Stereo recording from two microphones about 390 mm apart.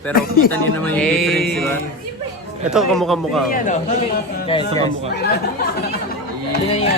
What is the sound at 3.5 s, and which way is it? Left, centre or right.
Speech, centre.